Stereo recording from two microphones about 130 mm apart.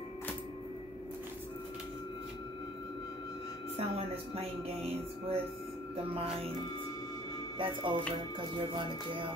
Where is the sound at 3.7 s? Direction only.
50° right (ahead or behind).